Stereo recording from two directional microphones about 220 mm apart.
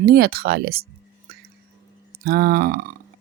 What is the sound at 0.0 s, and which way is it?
Speech, 45° right (ahead or behind).